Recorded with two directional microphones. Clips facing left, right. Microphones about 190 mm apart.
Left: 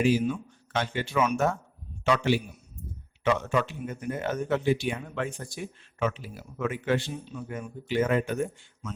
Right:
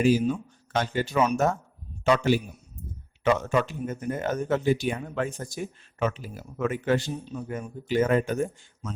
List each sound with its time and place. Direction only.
0.0 s a man's voice: 40° right (ahead or behind)